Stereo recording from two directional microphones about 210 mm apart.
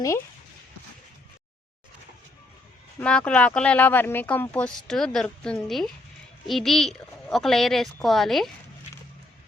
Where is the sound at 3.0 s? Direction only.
5° left (ahead or behind).